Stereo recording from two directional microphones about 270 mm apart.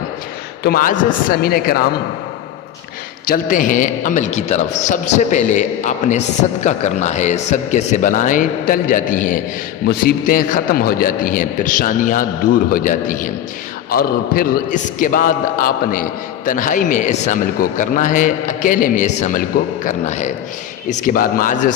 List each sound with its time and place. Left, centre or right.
0.6 s a man's voice: left
3.2 s a man's voice: left